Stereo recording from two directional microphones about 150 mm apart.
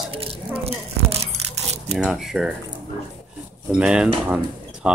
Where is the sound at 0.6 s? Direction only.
40° right (ahead or behind).